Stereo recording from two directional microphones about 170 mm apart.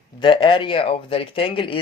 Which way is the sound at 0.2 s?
30° left (ahead or behind).